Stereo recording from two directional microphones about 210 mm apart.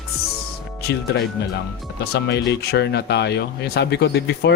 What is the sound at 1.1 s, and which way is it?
Speech, 55° left (ahead or behind).